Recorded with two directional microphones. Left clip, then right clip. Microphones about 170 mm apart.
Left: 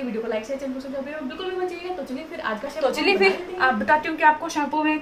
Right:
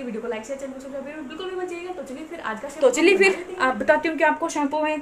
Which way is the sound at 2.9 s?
35° right (ahead or behind).